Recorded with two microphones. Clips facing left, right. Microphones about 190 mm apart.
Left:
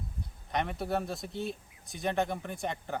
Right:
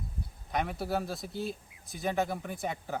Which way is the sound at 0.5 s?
Centre (ahead or behind).